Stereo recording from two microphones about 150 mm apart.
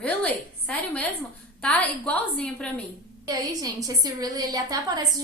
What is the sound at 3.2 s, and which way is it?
A woman's voice, 25° right (ahead or behind).